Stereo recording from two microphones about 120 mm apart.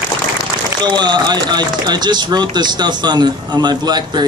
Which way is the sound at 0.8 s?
40° right (ahead or behind).